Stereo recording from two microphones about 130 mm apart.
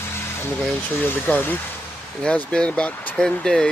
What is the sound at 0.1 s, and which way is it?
Vehicle, 20° left (ahead or behind).